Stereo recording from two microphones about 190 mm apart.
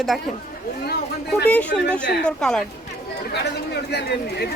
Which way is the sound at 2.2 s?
5° left (ahead or behind).